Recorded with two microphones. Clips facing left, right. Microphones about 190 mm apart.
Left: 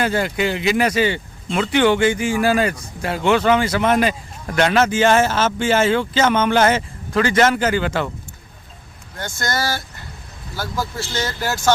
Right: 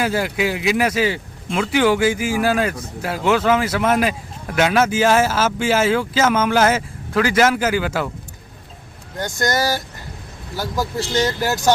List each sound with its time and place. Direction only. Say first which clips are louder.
0.0 s speech: even; 5° right (ahead or behind)
9.1 s speech: right 4 dB; 15° right (ahead or behind)